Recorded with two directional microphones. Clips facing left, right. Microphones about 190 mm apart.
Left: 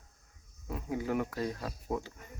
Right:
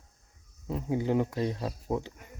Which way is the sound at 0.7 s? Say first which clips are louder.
Right 5 dB; 25° right (ahead or behind).